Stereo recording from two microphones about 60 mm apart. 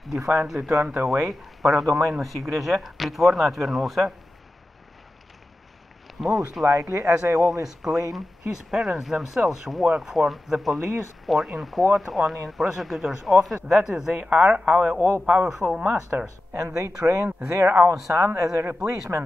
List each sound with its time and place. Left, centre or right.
0.0 s speech: centre
6.2 s speech: centre
6.9 s speech: right
7.6 s speech: centre
16.6 s speech: right